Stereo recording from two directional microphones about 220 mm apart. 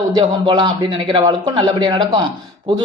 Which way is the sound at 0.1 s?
25° right (ahead or behind).